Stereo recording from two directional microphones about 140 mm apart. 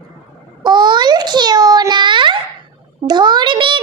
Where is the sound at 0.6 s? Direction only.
30° right (ahead or behind).